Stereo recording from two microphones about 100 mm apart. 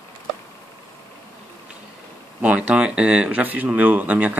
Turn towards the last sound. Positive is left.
turn(degrees=-15)  # may be behind; listen again after turning